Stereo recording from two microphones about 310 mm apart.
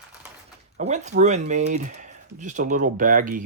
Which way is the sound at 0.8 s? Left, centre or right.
Right.